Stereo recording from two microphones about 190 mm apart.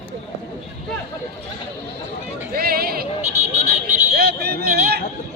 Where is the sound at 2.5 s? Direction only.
50° right (ahead or behind).